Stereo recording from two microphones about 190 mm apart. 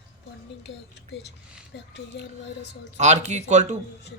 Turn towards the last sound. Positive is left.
turn(degrees=-35)  # may be behind; listen again after turning